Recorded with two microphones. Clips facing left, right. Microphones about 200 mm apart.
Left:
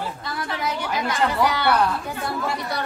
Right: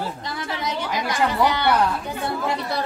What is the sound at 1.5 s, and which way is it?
Speech, 20° right (ahead or behind).